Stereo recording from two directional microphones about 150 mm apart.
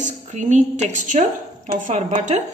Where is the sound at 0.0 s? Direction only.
50° right (ahead or behind).